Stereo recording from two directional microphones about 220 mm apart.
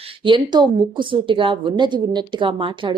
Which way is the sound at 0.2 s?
20° right (ahead or behind).